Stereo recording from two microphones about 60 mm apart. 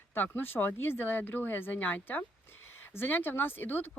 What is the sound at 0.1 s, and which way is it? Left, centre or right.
Speech, left.